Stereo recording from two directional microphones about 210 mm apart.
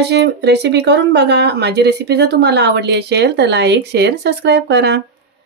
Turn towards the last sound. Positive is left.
turn(degrees=-55)  # may be behind; listen again after turning